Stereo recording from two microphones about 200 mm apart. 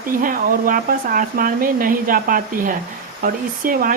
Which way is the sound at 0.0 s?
45° right (ahead or behind).